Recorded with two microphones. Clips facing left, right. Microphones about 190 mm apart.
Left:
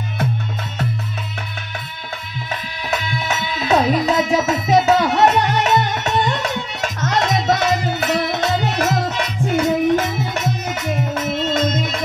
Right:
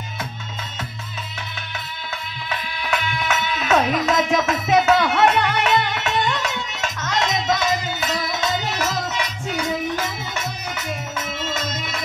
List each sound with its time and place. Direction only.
2.5 s music: 40° left (ahead or behind)
11.5 s music: 55° left (ahead or behind)